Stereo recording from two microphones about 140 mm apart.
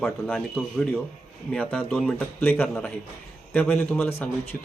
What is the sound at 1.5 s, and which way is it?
Speech, 5° left (ahead or behind).